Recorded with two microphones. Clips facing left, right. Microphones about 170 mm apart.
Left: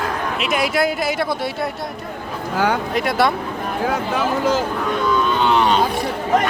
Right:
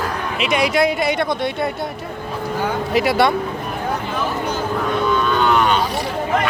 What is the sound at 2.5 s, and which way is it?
Speech, 75° left (ahead or behind).